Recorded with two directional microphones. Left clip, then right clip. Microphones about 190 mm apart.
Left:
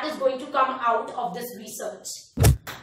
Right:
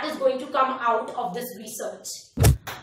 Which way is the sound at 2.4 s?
Centre (ahead or behind).